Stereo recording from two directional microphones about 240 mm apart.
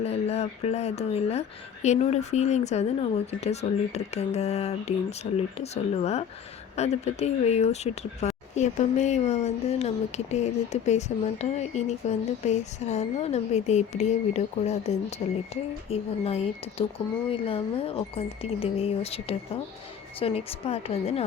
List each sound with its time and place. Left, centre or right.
0.0 s speech: left